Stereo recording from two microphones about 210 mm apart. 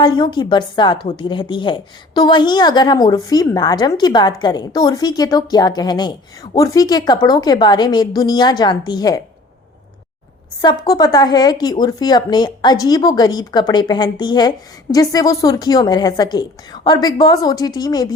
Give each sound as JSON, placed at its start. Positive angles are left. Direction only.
{"t": 0.0, "sound": "a woman's voice", "side_deg": 20}
{"t": 10.6, "sound": "a woman's voice", "side_deg": 20}